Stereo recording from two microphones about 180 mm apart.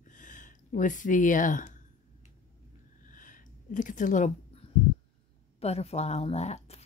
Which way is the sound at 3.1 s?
45° left (ahead or behind).